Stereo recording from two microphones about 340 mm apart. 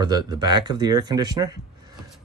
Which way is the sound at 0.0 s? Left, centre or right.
Centre.